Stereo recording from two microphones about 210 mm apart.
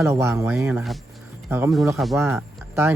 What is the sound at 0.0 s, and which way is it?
Speech, 15° right (ahead or behind).